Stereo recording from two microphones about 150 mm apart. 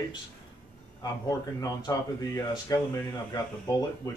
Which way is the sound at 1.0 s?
25° left (ahead or behind).